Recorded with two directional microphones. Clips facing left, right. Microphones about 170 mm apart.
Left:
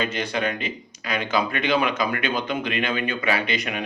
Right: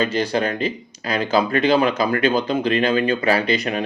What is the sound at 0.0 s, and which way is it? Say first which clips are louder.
Speech: right 5 dB; 35° right (ahead or behind).